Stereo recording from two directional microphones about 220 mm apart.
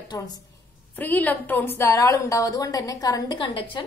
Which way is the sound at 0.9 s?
10° left (ahead or behind).